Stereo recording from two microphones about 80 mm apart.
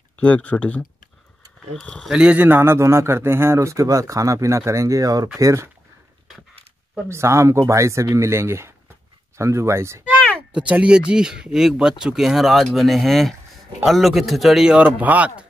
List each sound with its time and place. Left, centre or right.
0.2 s speech: centre
2.0 s speech: centre
2.4 s speech: right
7.1 s speech: right
10.5 s speech: centre
14.8 s speech: centre